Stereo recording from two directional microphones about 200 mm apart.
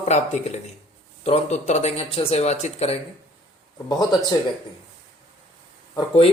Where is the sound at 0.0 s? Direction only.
35° left (ahead or behind).